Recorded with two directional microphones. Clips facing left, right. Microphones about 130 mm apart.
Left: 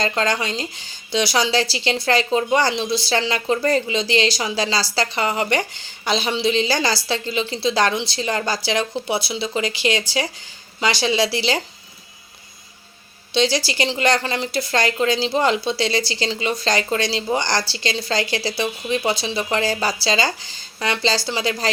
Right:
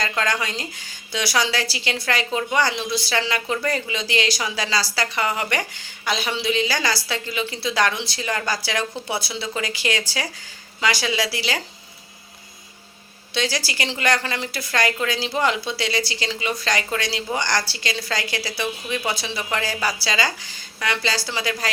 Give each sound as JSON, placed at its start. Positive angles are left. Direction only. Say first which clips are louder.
{"t": 0.0, "sound": "a woman's voice", "louder": "left 3 dB", "side_deg": 25}
{"t": 13.3, "sound": "a woman's voice", "louder": "left 6 dB", "side_deg": 25}